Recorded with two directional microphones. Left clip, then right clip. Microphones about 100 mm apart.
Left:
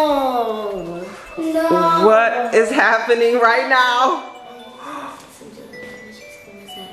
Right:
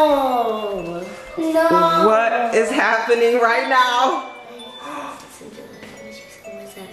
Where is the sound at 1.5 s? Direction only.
15° right (ahead or behind).